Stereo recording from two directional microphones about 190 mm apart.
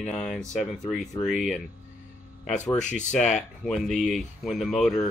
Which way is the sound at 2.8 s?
40° left (ahead or behind).